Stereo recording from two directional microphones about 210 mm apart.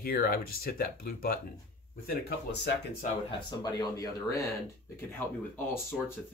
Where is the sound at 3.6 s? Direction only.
15° left (ahead or behind).